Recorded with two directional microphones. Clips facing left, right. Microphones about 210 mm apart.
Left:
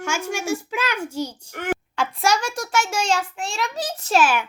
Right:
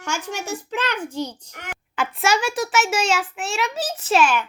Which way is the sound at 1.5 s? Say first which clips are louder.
Left 12 dB; 50° left (ahead or behind).